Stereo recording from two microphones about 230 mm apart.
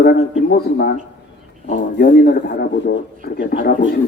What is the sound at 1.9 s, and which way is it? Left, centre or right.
A man's voice, left.